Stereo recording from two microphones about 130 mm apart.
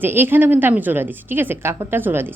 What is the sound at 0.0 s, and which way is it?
A woman's voice, 15° right (ahead or behind).